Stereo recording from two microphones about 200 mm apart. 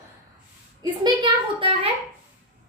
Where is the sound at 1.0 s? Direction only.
25° right (ahead or behind).